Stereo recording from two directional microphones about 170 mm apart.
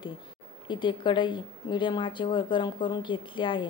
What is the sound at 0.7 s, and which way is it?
A woman's voice, 30° left (ahead or behind).